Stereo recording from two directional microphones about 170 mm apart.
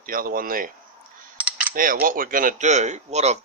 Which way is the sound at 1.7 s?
55° right (ahead or behind).